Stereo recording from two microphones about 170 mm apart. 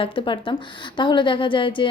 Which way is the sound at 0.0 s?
30° left (ahead or behind).